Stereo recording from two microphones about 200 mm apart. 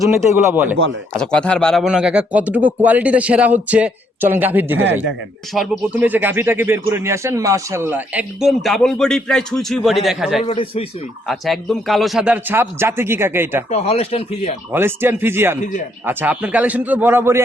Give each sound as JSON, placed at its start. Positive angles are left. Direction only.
{"t": 0.3, "sound": "speech", "side_deg": -10}
{"t": 1.1, "sound": "speech", "side_deg": 5}
{"t": 10.4, "sound": "speech", "side_deg": 30}
{"t": 11.3, "sound": "speech", "side_deg": 0}
{"t": 13.7, "sound": "speech", "side_deg": 35}
{"t": 14.7, "sound": "speech", "side_deg": -10}